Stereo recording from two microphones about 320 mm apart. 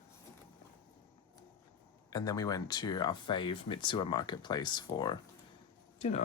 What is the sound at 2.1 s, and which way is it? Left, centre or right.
Speech, centre.